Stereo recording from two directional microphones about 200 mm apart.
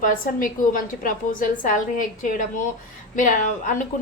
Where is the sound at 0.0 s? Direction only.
45° left (ahead or behind).